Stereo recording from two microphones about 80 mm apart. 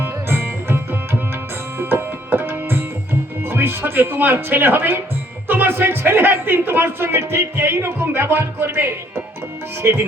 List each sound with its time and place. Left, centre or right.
0.0 s music: right
1.8 s tabla: right
5.5 s speech: right